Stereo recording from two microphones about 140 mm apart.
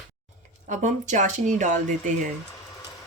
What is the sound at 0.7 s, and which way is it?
Speech, 60° right (ahead or behind).